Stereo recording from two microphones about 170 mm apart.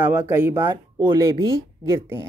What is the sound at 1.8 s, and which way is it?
Speech, 20° right (ahead or behind).